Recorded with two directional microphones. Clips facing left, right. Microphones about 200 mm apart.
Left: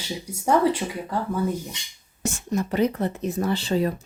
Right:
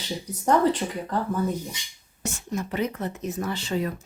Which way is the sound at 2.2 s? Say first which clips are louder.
Left 5 dB; 35° left (ahead or behind).